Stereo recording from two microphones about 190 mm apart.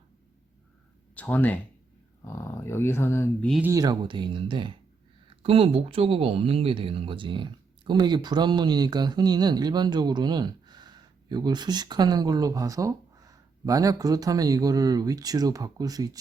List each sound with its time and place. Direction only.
1.1 s speech: 10° left (ahead or behind)
3.7 s speech: 20° right (ahead or behind)